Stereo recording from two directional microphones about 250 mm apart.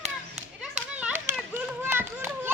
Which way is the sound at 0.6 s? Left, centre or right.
Centre.